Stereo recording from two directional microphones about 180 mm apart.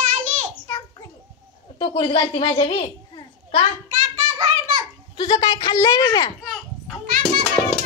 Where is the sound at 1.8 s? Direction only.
30° left (ahead or behind).